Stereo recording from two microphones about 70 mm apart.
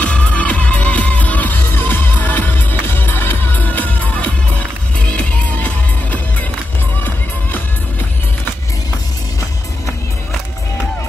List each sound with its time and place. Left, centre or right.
0.0 s music: centre